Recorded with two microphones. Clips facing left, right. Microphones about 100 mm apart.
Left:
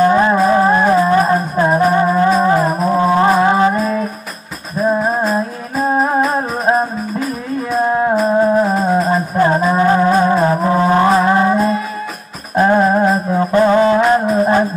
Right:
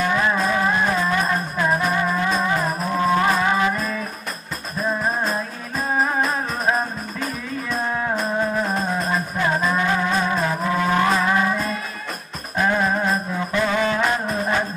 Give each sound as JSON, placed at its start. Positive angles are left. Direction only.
{"t": 0.0, "sound": "music", "side_deg": 35}